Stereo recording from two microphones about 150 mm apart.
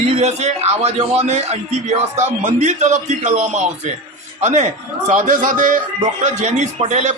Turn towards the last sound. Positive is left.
turn(degrees=-50)  # may be behind; listen again after turning